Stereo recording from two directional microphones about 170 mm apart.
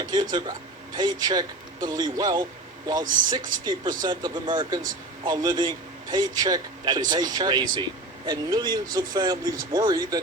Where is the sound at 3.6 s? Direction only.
25° right (ahead or behind).